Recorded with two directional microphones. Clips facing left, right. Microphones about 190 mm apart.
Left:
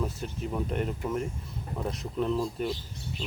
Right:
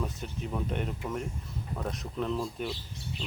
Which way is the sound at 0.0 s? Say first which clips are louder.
Left 3 dB; 5° left (ahead or behind).